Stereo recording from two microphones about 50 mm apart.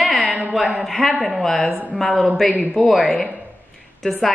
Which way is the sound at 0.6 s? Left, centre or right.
Centre.